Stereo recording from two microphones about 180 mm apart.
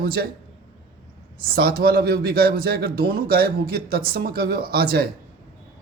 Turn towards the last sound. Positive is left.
turn(degrees=-60)  # may be behind; listen again after turning